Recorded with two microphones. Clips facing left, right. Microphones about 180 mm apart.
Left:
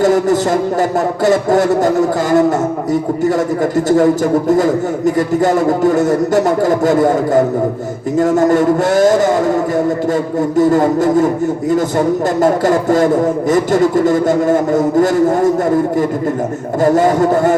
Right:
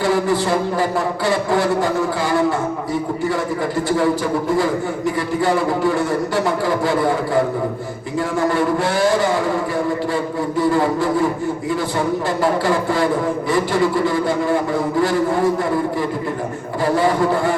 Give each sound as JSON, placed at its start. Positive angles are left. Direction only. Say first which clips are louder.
{"t": 0.0, "sound": "a man's voice", "louder": "left 6 dB", "side_deg": 45}
{"t": 3.8, "sound": "a man's voice", "louder": "left 7 dB", "side_deg": 45}